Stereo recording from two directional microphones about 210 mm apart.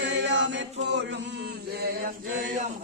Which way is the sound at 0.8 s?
55° right (ahead or behind).